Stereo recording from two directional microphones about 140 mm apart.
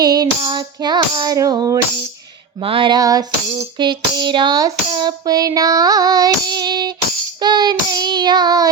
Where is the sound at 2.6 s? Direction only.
40° right (ahead or behind).